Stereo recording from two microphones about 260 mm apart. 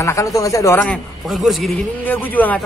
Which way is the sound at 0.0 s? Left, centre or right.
Centre.